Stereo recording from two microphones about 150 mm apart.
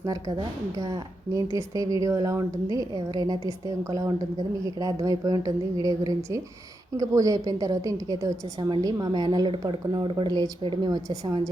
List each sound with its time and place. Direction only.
0.0 s a woman's voice: 25° right (ahead or behind)